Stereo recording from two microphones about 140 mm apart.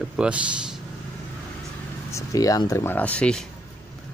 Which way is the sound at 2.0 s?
25° left (ahead or behind).